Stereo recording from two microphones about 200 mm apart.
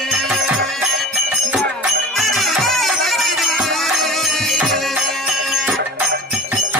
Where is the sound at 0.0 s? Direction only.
Centre (ahead or behind).